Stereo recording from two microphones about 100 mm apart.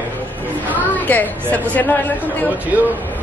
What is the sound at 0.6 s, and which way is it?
A woman's voice, 15° left (ahead or behind).